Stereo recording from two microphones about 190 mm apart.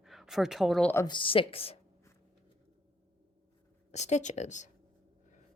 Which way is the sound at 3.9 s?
35° left (ahead or behind).